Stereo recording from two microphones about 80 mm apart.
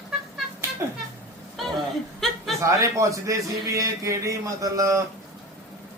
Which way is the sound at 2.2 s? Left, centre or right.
Centre.